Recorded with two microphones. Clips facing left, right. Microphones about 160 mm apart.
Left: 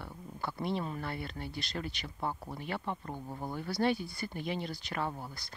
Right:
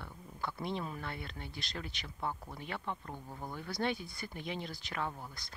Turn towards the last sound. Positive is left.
turn(degrees=0)  # may be behind; listen again after turning